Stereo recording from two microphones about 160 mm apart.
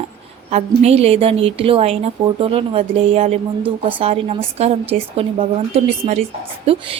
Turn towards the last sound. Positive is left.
turn(degrees=-40)  # may be behind; listen again after turning